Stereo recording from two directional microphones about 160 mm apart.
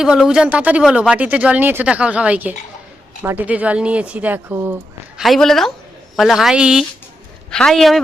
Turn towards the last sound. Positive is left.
turn(degrees=0)  # may be behind; listen again after turning